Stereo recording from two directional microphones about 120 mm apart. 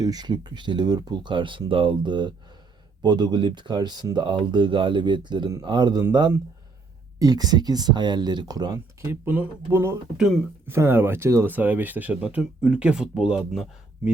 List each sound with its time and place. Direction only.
0.0 s speech: 35° right (ahead or behind)
7.2 s speech: 30° right (ahead or behind)
9.0 s speech: 20° right (ahead or behind)